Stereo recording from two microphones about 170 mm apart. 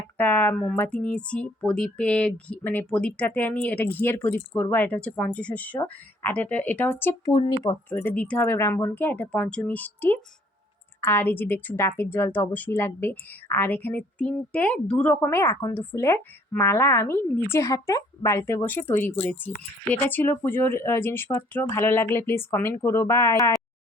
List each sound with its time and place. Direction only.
0.2 s speech: 10° left (ahead or behind)
7.9 s speech: 10° left (ahead or behind)